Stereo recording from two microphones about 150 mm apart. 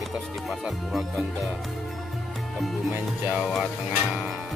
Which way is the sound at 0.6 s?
Centre (ahead or behind).